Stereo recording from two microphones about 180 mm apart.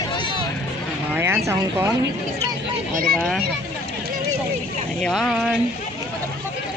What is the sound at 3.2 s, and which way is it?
Speech, centre (ahead or behind).